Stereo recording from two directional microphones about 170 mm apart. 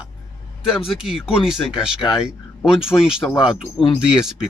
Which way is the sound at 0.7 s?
5° right (ahead or behind).